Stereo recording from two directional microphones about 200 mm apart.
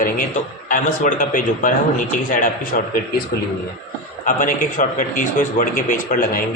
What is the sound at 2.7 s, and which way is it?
Speech, 45° left (ahead or behind).